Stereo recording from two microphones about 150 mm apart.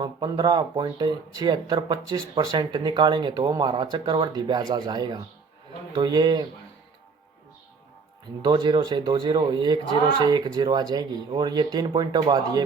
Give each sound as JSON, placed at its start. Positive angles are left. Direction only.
{"t": 0.0, "sound": "speech", "side_deg": -30}
{"t": 8.4, "sound": "speech", "side_deg": -30}